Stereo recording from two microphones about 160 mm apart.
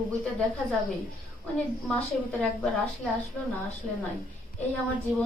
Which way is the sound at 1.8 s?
10° left (ahead or behind).